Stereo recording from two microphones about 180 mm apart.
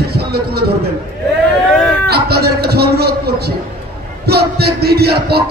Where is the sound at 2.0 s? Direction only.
60° right (ahead or behind).